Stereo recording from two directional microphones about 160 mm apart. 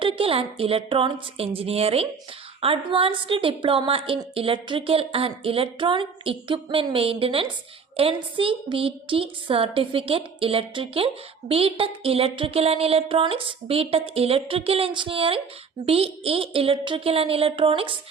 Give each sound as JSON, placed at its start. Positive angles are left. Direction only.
{"t": 0.0, "sound": "a woman's voice", "side_deg": -35}